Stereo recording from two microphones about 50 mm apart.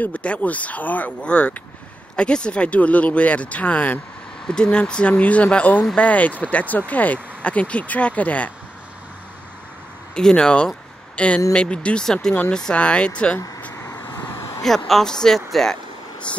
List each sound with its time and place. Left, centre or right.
0.0 s speech: left
10.1 s speech: centre
12.7 s speech: left
13.7 s vehicle: left
14.6 s speech: centre